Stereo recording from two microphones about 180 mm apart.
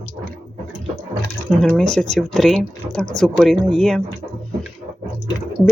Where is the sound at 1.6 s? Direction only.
5° left (ahead or behind).